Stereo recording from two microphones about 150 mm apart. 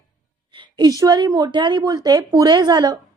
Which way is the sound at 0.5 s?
30° right (ahead or behind).